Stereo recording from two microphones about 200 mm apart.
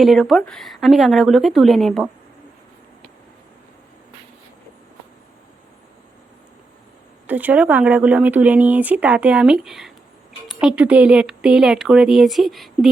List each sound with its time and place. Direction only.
0.0 s speech: centre (ahead or behind)
7.3 s speech: 10° right (ahead or behind)